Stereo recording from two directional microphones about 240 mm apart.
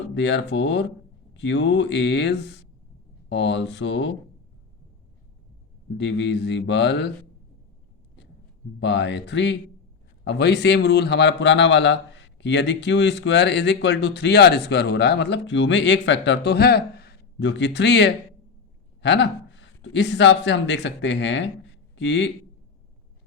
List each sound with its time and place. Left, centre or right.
0.1 s speech: left
6.0 s speech: left
8.8 s a man's voice: left